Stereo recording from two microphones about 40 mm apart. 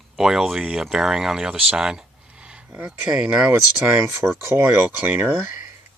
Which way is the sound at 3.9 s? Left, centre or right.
Right.